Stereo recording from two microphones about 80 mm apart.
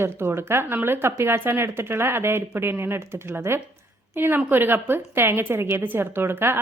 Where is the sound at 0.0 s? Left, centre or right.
Right.